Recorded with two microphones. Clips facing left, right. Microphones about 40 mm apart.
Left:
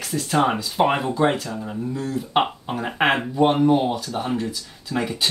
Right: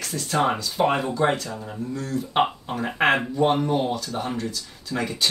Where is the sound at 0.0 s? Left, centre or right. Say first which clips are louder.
Left 2 dB; centre.